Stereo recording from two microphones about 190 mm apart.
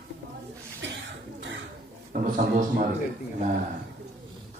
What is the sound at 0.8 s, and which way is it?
Cough, 70° right (ahead or behind).